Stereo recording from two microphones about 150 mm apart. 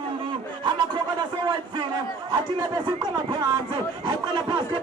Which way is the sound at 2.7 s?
30° right (ahead or behind).